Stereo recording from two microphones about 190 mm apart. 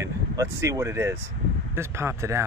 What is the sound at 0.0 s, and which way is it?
A man's voice, 15° right (ahead or behind).